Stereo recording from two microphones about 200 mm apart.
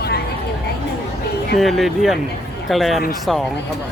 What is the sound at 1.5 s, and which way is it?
Speech, centre (ahead or behind).